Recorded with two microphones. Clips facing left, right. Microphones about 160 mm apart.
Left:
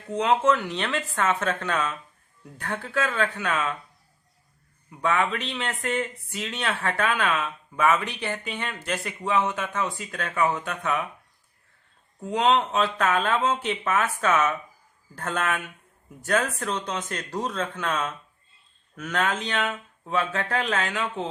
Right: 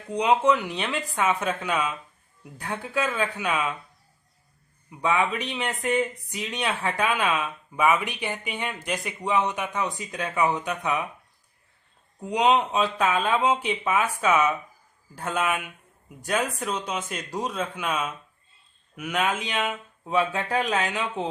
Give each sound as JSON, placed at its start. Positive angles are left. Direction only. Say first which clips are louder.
{"t": 0.1, "sound": "speech", "louder": "right 1 dB", "side_deg": -15}
{"t": 4.9, "sound": "speech", "louder": "even", "side_deg": -15}
{"t": 12.2, "sound": "speech", "louder": "right 1 dB", "side_deg": -15}